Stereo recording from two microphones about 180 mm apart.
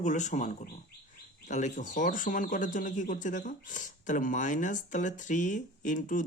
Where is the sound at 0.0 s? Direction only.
40° left (ahead or behind).